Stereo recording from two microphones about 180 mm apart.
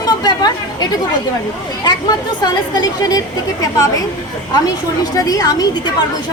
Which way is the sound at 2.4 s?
20° left (ahead or behind).